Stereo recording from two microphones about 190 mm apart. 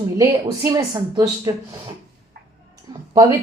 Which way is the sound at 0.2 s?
15° right (ahead or behind).